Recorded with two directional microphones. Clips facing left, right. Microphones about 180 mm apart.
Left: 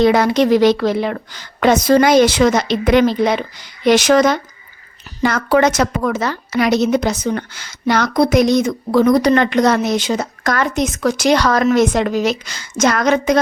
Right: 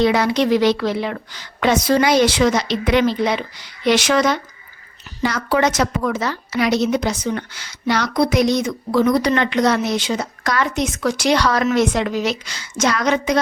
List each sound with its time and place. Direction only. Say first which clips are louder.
0.0 s a woman's voice: left 4 dB; 45° left (ahead or behind)